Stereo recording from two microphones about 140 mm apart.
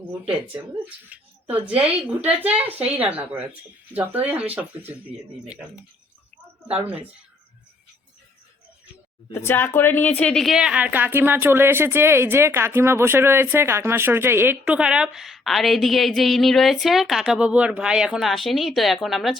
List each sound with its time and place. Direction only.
1.1 s a woman's voice: 10° right (ahead or behind)
9.3 s a woman's voice: 20° left (ahead or behind); by 19.4 s centre (ahead or behind)